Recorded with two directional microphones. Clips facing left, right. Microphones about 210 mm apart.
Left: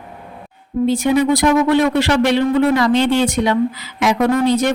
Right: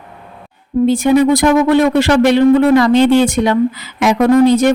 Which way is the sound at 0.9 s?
50° right (ahead or behind).